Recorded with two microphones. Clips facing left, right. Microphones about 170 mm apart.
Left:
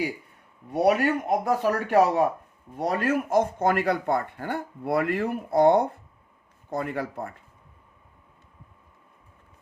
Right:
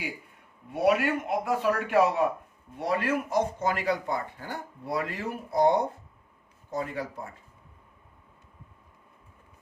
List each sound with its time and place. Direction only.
0.7 s a man's voice: 40° left (ahead or behind); by 7.3 s 60° left (ahead or behind)